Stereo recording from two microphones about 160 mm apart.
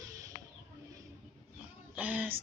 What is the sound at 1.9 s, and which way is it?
Speech, 10° right (ahead or behind).